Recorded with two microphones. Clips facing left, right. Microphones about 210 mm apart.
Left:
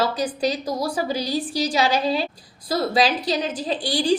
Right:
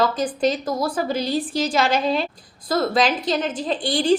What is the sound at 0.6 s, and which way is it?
Speech, 10° left (ahead or behind).